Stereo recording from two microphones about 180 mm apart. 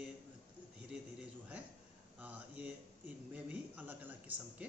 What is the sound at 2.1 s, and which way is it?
Mantra, 10° right (ahead or behind).